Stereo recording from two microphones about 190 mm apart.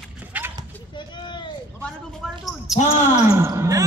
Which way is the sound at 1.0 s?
25° left (ahead or behind).